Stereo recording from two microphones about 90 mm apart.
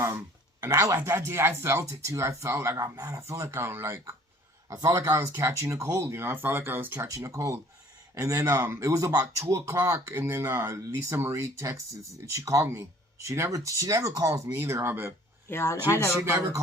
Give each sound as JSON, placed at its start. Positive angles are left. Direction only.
{"t": 0.6, "sound": "speech", "side_deg": -30}
{"t": 7.1, "sound": "speech", "side_deg": -35}
{"t": 15.4, "sound": "speech", "side_deg": 30}
{"t": 16.2, "sound": "speech", "side_deg": -30}